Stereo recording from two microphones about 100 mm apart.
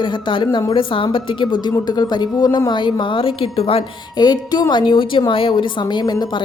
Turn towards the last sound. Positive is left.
turn(degrees=50)  # may be behind; listen again after turning